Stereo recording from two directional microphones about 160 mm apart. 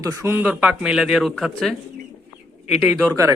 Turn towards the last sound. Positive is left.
turn(degrees=0)  # may be behind; listen again after turning